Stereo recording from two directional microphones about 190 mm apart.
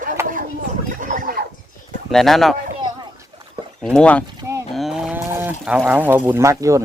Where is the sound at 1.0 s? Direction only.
45° right (ahead or behind).